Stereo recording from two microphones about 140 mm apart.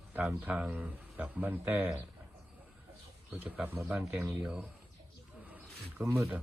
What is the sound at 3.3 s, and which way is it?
Speech, 10° right (ahead or behind).